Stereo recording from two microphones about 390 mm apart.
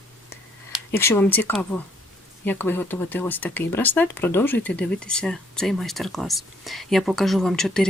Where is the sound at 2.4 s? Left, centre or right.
Centre.